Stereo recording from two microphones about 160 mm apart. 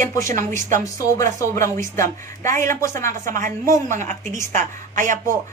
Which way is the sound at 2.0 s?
55° right (ahead or behind).